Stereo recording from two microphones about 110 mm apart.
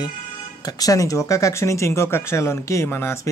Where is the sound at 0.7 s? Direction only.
35° left (ahead or behind).